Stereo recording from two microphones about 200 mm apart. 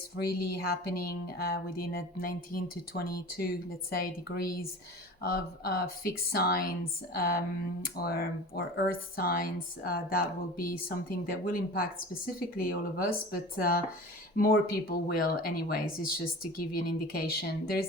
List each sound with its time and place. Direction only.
0.3 s speech: 50° left (ahead or behind)